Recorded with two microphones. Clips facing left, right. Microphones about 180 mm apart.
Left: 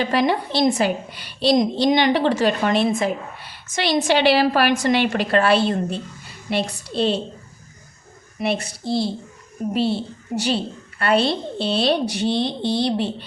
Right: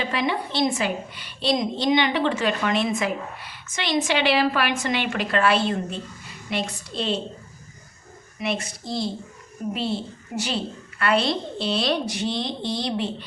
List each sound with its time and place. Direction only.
0.0 s a woman's voice: 40° left (ahead or behind)
8.4 s a woman's voice: 35° left (ahead or behind)